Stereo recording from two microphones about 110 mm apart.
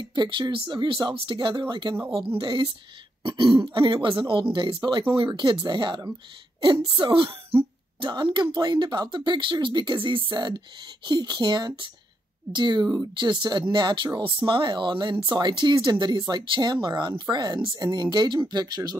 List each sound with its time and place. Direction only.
0.0 s speech: 45° right (ahead or behind)
3.3 s speech: 55° right (ahead or behind); by 18.9 s 35° right (ahead or behind)